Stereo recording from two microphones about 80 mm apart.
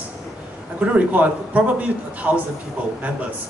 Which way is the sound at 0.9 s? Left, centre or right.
Centre.